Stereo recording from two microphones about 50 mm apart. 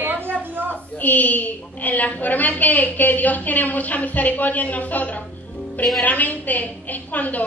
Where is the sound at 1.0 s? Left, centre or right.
Left.